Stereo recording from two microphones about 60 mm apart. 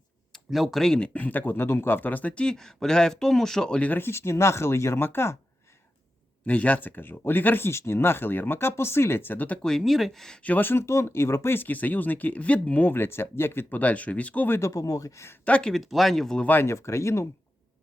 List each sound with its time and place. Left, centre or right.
0.5 s speech: centre
0.9 s speech: left
3.8 s speech: left
6.4 s speech: left
9.6 s speech: centre
10.3 s speech: left
10.8 s speech: left
14.6 s speech: left
15.4 s speech: centre
15.7 s speech: centre
16.5 s speech: left
16.7 s speech: left